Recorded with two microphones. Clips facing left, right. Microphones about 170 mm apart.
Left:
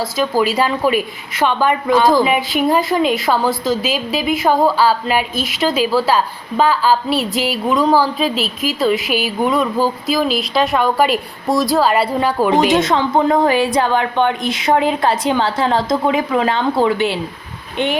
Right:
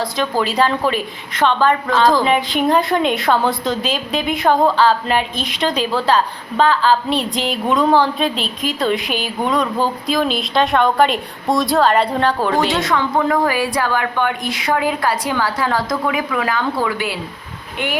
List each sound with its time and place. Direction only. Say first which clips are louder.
0.0 s a woman's voice: left 3 dB; 5° left (ahead or behind); by 17.9 s 20° left (ahead or behind)